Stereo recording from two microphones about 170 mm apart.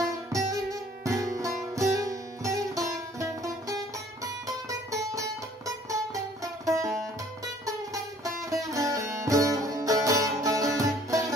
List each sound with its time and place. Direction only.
0.0 s music: 20° right (ahead or behind)